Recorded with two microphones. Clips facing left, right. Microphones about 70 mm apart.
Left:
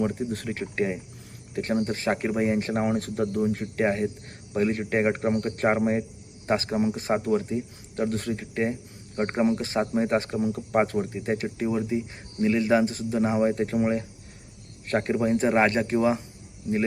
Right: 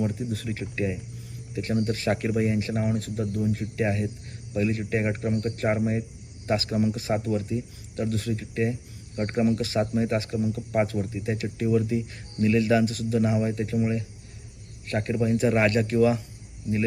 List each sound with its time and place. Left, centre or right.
0.0 s speech: left